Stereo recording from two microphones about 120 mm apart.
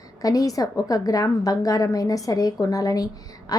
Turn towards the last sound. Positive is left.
turn(degrees=30)  # may be behind; listen again after turning